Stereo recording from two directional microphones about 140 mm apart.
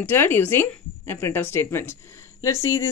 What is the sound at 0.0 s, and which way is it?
Speech, 15° left (ahead or behind).